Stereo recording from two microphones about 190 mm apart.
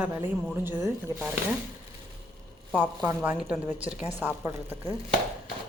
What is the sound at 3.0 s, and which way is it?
Speech, 10° right (ahead or behind).